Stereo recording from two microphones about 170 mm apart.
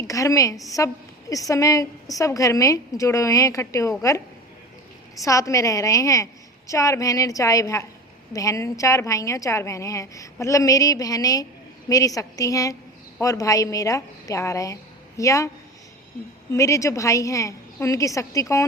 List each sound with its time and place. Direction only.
0.1 s a woman's voice: 20° left (ahead or behind)
5.2 s a woman's voice: 20° left (ahead or behind)
16.5 s a woman's voice: 20° left (ahead or behind)